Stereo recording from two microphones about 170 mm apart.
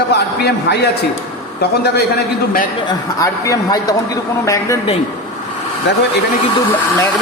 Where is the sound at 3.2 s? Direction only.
20° left (ahead or behind).